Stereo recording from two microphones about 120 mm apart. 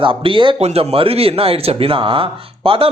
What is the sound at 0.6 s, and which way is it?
Speech, 60° right (ahead or behind).